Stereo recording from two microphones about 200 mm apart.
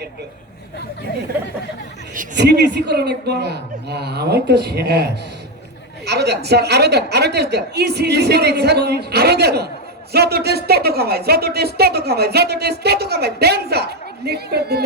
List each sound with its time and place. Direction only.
2.3 s a woman's voice: 60° right (ahead or behind)